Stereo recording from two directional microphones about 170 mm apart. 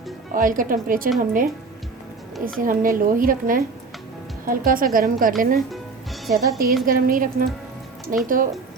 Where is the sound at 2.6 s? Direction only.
55° right (ahead or behind).